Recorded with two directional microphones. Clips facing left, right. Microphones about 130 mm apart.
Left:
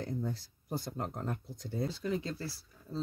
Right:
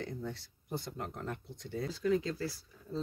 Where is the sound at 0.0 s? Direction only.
40° left (ahead or behind).